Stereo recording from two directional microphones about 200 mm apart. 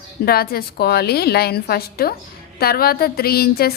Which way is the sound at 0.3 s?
50° left (ahead or behind).